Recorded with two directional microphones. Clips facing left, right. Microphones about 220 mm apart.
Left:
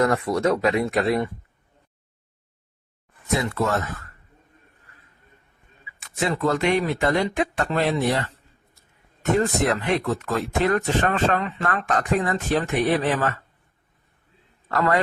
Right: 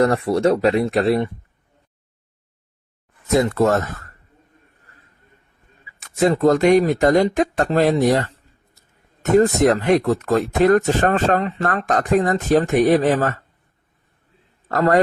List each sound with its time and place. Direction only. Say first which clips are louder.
0.0 s speech: right 4 dB; 30° right (ahead or behind)
3.3 s speech: right 7 dB; 45° right (ahead or behind)
6.0 s speech: right 8 dB; 40° right (ahead or behind)
14.7 s speech: right 6 dB; 40° right (ahead or behind)